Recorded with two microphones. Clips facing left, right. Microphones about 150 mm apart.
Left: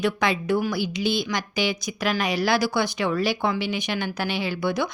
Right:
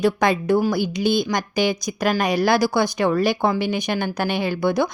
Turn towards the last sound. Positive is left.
turn(degrees=-45)  # may be behind; listen again after turning